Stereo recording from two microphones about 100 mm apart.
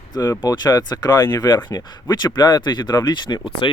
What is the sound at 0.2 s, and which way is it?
Speech, 35° left (ahead or behind).